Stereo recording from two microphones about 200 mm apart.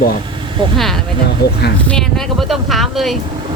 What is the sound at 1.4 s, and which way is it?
Speech, 50° left (ahead or behind).